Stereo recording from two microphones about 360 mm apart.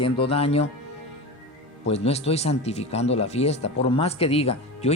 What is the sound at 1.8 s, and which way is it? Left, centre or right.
Speech, centre.